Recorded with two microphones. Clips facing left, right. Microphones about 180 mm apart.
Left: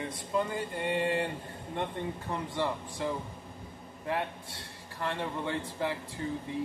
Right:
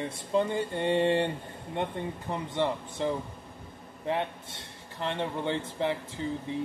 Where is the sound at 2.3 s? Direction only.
20° right (ahead or behind).